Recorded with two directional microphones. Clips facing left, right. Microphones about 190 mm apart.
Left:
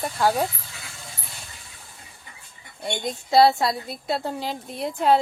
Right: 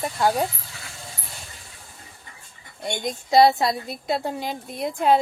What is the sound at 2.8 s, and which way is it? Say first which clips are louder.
A woman's voice: right 1 dB; 15° right (ahead or behind).